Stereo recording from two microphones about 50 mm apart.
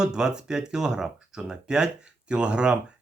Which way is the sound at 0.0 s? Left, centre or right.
Centre.